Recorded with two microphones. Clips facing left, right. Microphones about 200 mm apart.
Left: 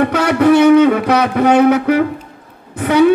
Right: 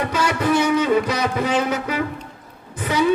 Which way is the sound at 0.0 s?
60° left (ahead or behind).